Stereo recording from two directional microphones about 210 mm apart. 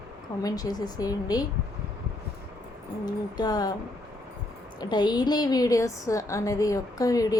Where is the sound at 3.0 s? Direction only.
20° left (ahead or behind).